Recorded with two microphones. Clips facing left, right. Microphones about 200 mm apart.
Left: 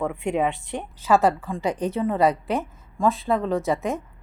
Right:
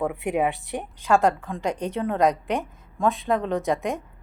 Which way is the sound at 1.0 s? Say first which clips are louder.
Left 1 dB; 5° left (ahead or behind).